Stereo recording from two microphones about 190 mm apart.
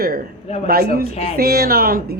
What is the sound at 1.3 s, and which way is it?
Speech, 55° right (ahead or behind).